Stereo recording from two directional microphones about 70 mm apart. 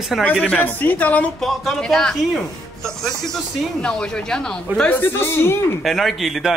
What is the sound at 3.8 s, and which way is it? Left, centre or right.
Speech, centre.